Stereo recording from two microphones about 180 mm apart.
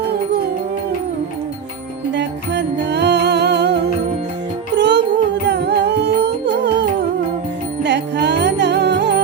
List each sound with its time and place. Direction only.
2.1 s music: 75° right (ahead or behind)
7.9 s music: 75° right (ahead or behind)